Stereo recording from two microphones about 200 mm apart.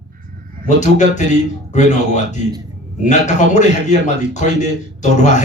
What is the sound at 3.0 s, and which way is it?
A man's voice, 35° left (ahead or behind).